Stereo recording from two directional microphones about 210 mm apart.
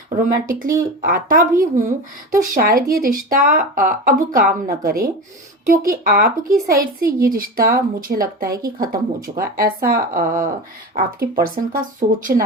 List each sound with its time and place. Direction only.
0.2 s a woman's voice: 40° right (ahead or behind)